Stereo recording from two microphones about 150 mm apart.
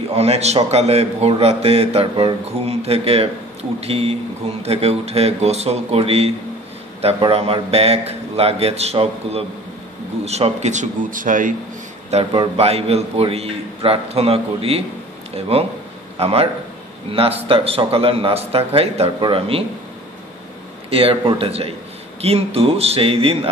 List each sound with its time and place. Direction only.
0.1 s a man's voice: 45° right (ahead or behind); by 11.5 s 60° right (ahead or behind)
12.1 s a man's voice: 40° right (ahead or behind)
20.9 s a man's voice: 40° right (ahead or behind)